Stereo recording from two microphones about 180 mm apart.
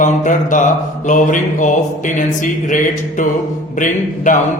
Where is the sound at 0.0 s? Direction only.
45° left (ahead or behind).